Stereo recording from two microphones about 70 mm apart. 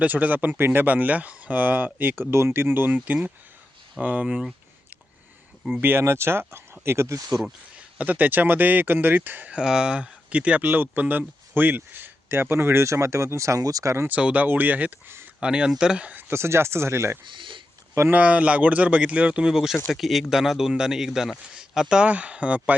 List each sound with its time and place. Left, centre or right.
0.0 s speech: right
2.3 s speech: right; by 4.4 s centre
5.8 s speech: right
7.9 s speech: right
9.6 s speech: centre; by 13.9 s right
14.1 s speech: centre
16.3 s speech: right
18.1 s speech: centre